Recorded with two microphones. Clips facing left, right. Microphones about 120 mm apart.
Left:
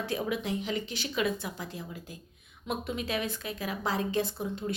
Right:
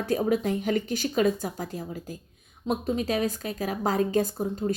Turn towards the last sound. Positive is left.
turn(degrees=-40)  # may be behind; listen again after turning